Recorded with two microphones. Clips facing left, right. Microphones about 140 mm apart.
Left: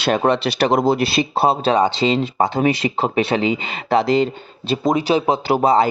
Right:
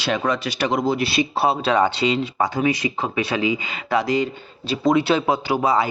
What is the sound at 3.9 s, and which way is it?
Speech, 25° left (ahead or behind).